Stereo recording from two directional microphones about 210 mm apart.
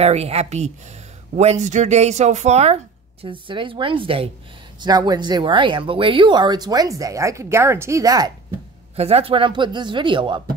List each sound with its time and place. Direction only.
0.0 s speech: 30° right (ahead or behind)
8.9 s speech: 30° right (ahead or behind)